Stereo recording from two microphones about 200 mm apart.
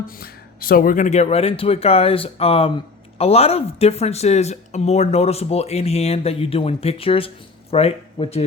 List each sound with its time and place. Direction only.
0.1 s speech: 45° left (ahead or behind); by 8.4 s 30° left (ahead or behind)